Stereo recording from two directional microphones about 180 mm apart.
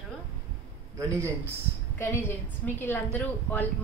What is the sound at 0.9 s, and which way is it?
Speech, 15° right (ahead or behind).